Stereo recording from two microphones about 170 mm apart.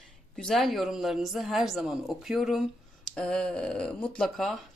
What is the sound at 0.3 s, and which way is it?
Speech, centre (ahead or behind).